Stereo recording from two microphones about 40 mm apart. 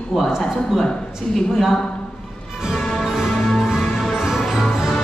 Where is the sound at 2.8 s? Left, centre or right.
Centre.